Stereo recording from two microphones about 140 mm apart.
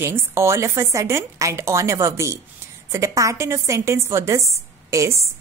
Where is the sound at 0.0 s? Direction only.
20° right (ahead or behind).